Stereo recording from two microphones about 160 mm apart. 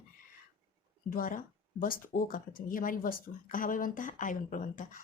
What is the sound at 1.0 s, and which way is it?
Speech, 60° left (ahead or behind).